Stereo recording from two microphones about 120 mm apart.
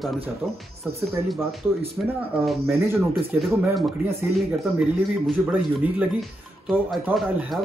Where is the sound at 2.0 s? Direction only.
15° right (ahead or behind).